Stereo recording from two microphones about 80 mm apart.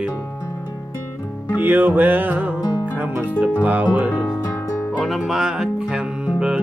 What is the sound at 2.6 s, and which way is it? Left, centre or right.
Music, left.